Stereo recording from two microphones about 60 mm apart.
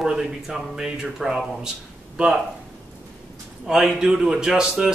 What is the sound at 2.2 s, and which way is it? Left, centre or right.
Speech, centre.